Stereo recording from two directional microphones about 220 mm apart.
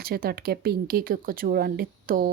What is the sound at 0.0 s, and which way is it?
Speech, 45° right (ahead or behind).